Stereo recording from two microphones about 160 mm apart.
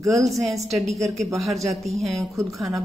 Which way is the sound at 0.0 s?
20° right (ahead or behind).